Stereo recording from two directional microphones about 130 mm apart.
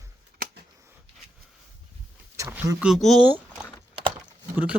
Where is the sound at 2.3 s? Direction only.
20° right (ahead or behind).